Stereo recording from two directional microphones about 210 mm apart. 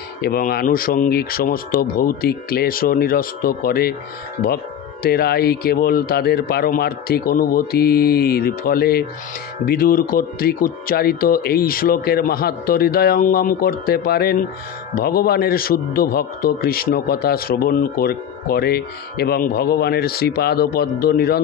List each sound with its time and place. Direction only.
0.2 s a man's voice: 45° left (ahead or behind)
5.0 s a man's voice: 50° left (ahead or behind)